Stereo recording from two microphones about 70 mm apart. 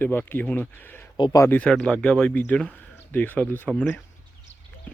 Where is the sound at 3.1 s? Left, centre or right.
Left.